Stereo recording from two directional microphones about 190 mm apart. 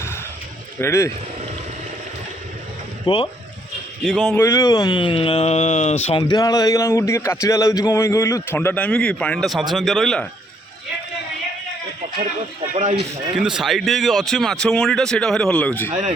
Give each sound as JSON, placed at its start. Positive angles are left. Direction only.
{"t": 0.8, "sound": "speech", "side_deg": 15}
{"t": 3.1, "sound": "speech", "side_deg": 25}
{"t": 4.0, "sound": "speech", "side_deg": 0}
{"t": 4.4, "sound": "speech", "side_deg": 20}
{"t": 13.3, "sound": "speech", "side_deg": -5}